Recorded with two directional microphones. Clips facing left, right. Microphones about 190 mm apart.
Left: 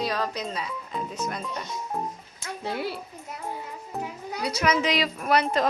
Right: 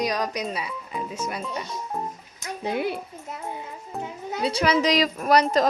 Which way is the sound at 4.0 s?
25° right (ahead or behind).